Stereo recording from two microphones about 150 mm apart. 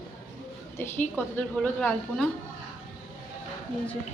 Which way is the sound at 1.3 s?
10° left (ahead or behind).